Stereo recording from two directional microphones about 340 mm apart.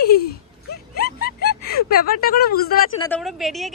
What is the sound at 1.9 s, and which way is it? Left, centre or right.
Speech, left.